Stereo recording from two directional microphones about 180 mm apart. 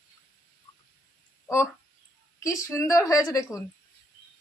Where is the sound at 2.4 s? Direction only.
15° left (ahead or behind).